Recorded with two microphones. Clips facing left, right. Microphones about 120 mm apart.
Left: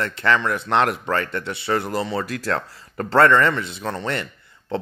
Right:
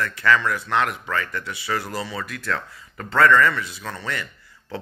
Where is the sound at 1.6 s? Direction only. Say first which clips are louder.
Left 5 dB; 25° left (ahead or behind).